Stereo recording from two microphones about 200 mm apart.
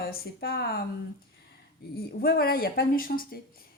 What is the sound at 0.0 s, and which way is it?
Speech, 50° left (ahead or behind).